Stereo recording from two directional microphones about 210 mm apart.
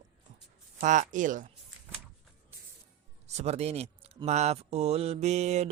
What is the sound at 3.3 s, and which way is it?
Speech, 30° right (ahead or behind).